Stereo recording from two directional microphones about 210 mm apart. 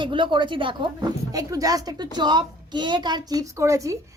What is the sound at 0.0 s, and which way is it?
A woman's voice, 25° right (ahead or behind).